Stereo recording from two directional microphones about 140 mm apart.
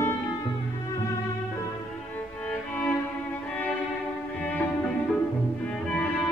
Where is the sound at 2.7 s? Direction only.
10° left (ahead or behind).